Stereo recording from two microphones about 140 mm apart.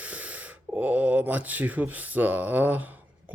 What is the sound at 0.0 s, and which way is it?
Speech, 10° right (ahead or behind).